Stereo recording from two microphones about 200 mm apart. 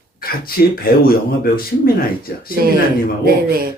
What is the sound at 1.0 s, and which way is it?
Speech, 45° left (ahead or behind).